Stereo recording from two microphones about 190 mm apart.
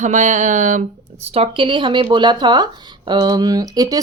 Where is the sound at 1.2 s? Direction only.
30° right (ahead or behind).